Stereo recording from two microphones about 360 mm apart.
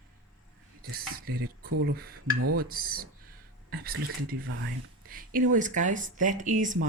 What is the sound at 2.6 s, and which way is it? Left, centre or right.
Speech, right.